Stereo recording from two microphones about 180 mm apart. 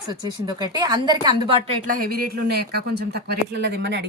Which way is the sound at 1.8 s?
50° right (ahead or behind).